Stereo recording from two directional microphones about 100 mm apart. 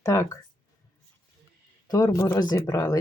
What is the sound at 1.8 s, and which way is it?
Speech, 40° left (ahead or behind).